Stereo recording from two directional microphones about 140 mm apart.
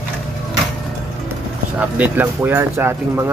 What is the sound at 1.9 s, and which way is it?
Speech, 10° right (ahead or behind).